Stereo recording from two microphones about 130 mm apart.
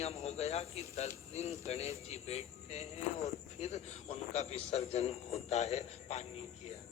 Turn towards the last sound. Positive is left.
turn(degrees=60)  # may be behind; listen again after turning